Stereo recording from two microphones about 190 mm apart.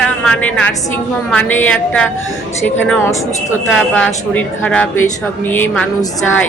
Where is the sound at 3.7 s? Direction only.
5° left (ahead or behind).